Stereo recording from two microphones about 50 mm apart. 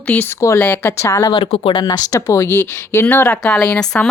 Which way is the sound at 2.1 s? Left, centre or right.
Left.